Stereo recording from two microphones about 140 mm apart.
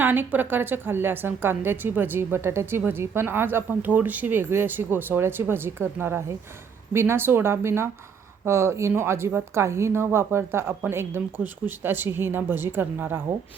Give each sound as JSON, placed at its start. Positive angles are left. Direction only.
{"t": 0.0, "sound": "a woman's voice", "side_deg": -15}